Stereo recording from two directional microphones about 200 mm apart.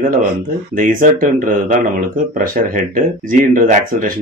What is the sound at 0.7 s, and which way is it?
Speech, 40° right (ahead or behind).